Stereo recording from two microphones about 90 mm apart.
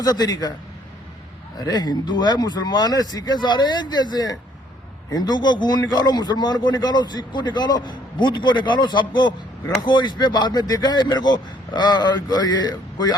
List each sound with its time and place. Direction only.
0.0 s speech: 45° left (ahead or behind)
1.5 s a man's voice: 45° left (ahead or behind)